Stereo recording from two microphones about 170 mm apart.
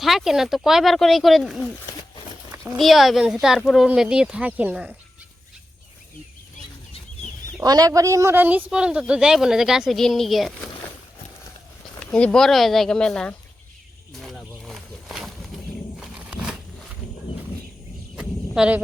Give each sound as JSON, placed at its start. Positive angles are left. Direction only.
{"t": 0.0, "sound": "speech", "side_deg": 0}
{"t": 2.7, "sound": "speech", "side_deg": 0}
{"t": 7.6, "sound": "a woman's voice", "side_deg": -20}
{"t": 11.9, "sound": "speech", "side_deg": 5}
{"t": 14.1, "sound": "a sound", "side_deg": 0}
{"t": 18.2, "sound": "a sound", "side_deg": -5}